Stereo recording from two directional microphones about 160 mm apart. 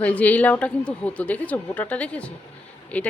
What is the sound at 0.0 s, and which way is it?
Speech, 10° left (ahead or behind).